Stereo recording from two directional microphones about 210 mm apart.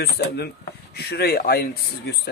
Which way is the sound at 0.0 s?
50° left (ahead or behind).